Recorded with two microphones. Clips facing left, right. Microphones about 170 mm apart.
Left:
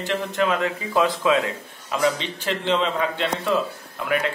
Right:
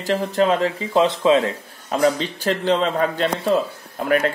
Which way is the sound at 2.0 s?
40° right (ahead or behind).